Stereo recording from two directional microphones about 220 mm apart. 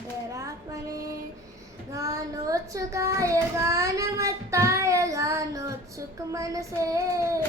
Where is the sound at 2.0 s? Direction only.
15° right (ahead or behind).